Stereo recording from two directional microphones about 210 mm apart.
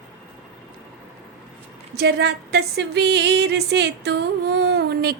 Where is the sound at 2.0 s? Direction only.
50° right (ahead or behind).